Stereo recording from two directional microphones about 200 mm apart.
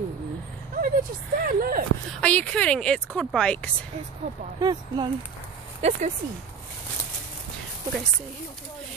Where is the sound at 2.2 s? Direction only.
5° left (ahead or behind).